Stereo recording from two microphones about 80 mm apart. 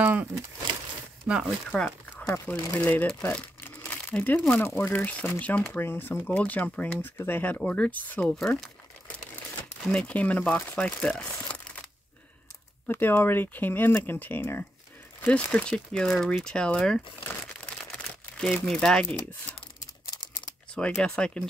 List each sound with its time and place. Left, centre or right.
0.0 s speech: right
1.7 s speech: centre
2.8 s speech: left
3.6 s crumpling: left
4.6 s speech: left
4.9 s speech: centre
5.7 s speech: left
8.4 s speech: centre
9.8 s speech: centre
12.8 s speech: left
15.2 s speech: centre
17.9 s crumpling: centre
20.7 s speech: centre